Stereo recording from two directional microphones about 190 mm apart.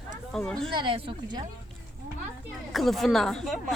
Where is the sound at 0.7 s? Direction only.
25° right (ahead or behind).